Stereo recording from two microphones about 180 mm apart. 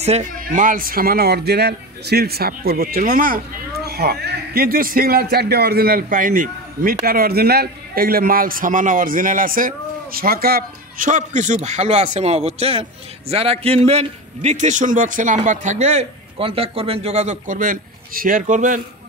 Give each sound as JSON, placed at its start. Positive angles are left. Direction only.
{"t": 0.0, "sound": "speech", "side_deg": -40}
{"t": 3.8, "sound": "a man's voice", "side_deg": -60}